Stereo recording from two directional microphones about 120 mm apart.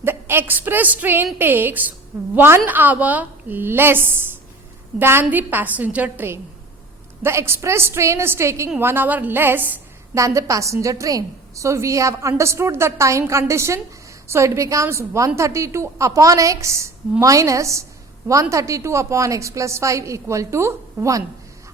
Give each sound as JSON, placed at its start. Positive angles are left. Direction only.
{"t": 0.0, "sound": "a woman's voice", "side_deg": -20}